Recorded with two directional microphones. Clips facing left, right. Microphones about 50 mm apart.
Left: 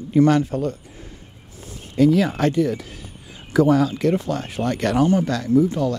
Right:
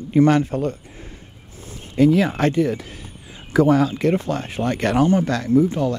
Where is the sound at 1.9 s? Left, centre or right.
Right.